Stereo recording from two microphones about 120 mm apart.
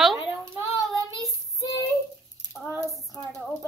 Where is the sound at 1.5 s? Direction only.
25° left (ahead or behind).